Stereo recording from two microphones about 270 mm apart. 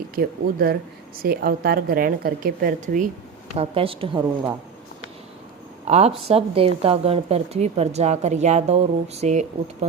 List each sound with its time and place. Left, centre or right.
0.2 s a woman's voice: right; by 4.5 s centre
5.9 s a woman's voice: right